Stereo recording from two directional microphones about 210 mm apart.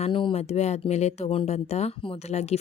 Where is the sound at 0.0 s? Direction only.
25° left (ahead or behind).